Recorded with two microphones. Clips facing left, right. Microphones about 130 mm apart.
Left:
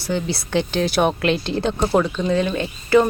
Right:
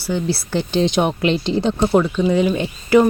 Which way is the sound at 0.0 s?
10° right (ahead or behind).